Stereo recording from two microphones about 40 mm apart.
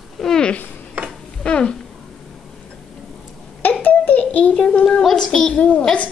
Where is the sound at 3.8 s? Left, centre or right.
Left.